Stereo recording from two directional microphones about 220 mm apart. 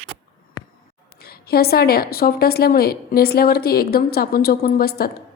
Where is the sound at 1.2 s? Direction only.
45° left (ahead or behind).